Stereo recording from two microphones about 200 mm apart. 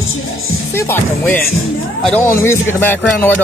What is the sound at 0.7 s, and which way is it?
Speech, 10° left (ahead or behind).